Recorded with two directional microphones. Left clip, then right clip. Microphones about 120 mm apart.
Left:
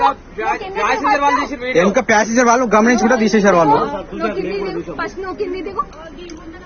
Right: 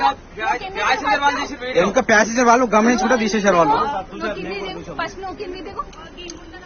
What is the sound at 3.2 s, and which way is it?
Speech, 15° left (ahead or behind).